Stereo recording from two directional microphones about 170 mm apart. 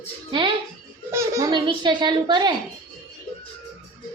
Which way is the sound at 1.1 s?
15° right (ahead or behind).